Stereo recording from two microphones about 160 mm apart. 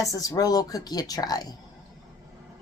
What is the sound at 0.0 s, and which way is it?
A woman's voice, 20° left (ahead or behind).